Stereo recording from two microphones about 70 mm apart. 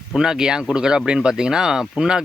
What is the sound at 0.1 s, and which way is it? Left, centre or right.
Speech, centre.